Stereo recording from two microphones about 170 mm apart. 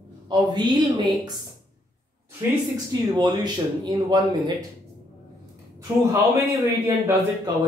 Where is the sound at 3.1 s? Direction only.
25° right (ahead or behind).